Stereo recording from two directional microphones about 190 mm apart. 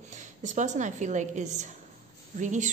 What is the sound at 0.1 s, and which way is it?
A woman's voice, 40° right (ahead or behind).